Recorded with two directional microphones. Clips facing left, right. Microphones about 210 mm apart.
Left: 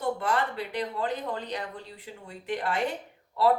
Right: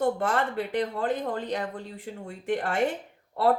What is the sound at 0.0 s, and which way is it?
A woman's voice, 45° right (ahead or behind).